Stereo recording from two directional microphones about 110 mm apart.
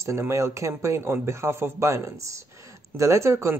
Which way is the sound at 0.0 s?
25° right (ahead or behind).